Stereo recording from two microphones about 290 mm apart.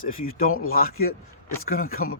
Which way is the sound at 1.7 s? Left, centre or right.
Left.